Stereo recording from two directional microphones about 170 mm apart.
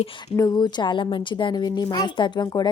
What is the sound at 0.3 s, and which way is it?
A woman's voice, 20° left (ahead or behind).